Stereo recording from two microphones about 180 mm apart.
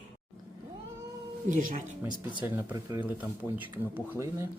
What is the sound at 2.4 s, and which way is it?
Speech, 15° right (ahead or behind).